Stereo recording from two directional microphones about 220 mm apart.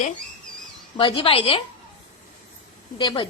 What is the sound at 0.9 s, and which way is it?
Speech, 25° left (ahead or behind).